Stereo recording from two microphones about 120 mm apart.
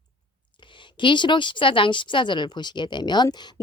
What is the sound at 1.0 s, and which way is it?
Speech, 40° left (ahead or behind).